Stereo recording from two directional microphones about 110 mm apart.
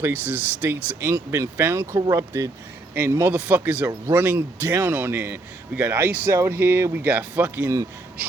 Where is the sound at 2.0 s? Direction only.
35° right (ahead or behind).